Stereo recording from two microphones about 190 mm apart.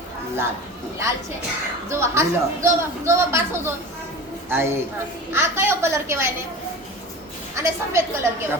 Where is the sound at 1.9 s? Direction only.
15° right (ahead or behind).